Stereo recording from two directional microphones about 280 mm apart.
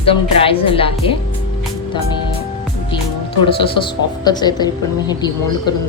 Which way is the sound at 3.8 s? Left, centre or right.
Centre.